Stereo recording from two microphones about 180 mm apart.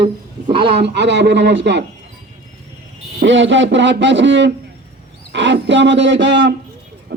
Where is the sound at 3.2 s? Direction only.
90° right.